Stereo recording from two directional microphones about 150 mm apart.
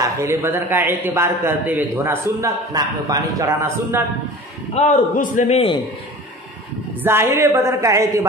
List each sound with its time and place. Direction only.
0.0 s a man's voice: 20° right (ahead or behind)
4.7 s a man's voice: 60° left (ahead or behind)
7.0 s a woman's voice: 15° right (ahead or behind)